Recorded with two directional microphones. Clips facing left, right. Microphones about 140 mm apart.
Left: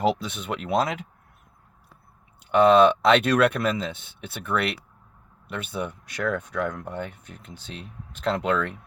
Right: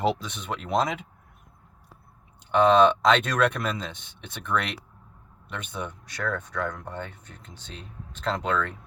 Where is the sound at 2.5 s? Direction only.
10° left (ahead or behind).